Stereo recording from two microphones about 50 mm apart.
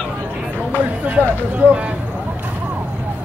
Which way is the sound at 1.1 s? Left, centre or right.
Right.